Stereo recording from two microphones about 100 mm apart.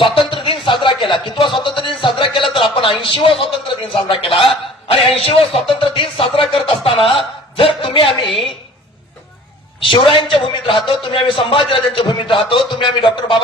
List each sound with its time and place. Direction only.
0.0 s a sound: 60° left (ahead or behind)
3.0 s music: 60° left (ahead or behind)
5.1 s music: 70° left (ahead or behind)
8.3 s a woman's voice: centre (ahead or behind)
9.8 s music: 60° left (ahead or behind)